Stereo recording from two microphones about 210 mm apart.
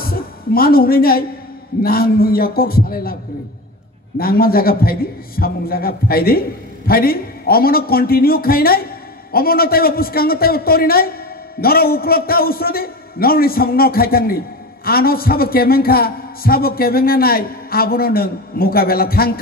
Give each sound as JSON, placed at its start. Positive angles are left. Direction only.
{"t": 0.0, "sound": "a woman's voice", "side_deg": 45}
{"t": 4.2, "sound": "a man's voice", "side_deg": 45}